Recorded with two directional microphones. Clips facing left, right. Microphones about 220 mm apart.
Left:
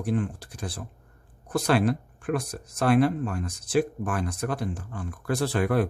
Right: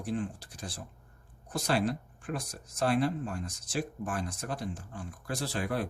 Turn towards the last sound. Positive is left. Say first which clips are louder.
# left 9 dB
turn(degrees=60)  # may be behind; listen again after turning